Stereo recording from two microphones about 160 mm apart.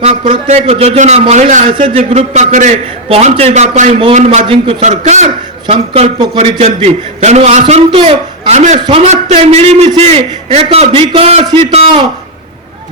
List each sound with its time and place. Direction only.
0.0 s a man's voice: 50° right (ahead or behind)
1.9 s a man's voice: 35° right (ahead or behind)
4.9 s a man's voice: 45° right (ahead or behind)